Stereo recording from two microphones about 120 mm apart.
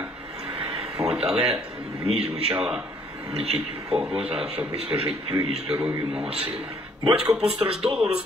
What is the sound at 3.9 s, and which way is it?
A man's voice, 5° right (ahead or behind).